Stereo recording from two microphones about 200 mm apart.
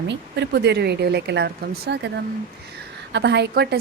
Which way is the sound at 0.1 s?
60° right (ahead or behind).